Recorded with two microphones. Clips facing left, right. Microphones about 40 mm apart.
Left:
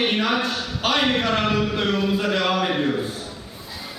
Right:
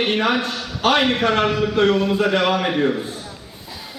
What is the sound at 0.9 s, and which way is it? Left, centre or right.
Speech, right.